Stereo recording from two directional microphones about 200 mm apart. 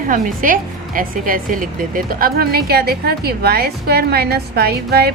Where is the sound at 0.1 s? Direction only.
45° right (ahead or behind).